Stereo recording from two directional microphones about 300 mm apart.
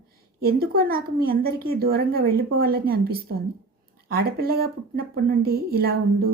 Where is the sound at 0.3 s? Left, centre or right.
Right.